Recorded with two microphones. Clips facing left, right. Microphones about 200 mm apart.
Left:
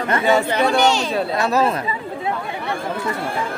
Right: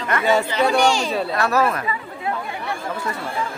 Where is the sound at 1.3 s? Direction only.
25° left (ahead or behind).